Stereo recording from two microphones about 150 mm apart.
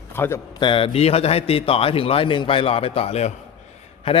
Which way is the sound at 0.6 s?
35° left (ahead or behind).